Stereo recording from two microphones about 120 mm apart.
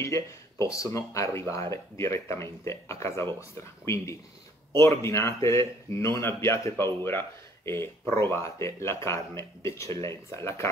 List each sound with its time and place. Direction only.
0.0 s speech: 25° left (ahead or behind)